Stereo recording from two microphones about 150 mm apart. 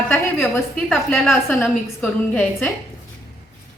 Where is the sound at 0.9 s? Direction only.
Centre (ahead or behind).